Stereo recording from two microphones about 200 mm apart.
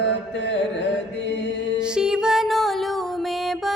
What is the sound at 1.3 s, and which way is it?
Mantra, 65° left (ahead or behind).